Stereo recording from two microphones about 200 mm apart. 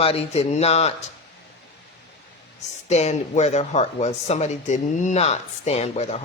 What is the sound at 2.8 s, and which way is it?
Speech, 35° left (ahead or behind).